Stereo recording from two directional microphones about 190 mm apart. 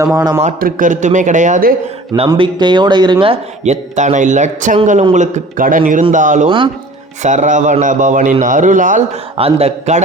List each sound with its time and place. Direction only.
0.0 s a man's voice: 15° right (ahead or behind)
0.4 s a man's voice: 40° right (ahead or behind)
2.1 s a man's voice: 25° right (ahead or behind)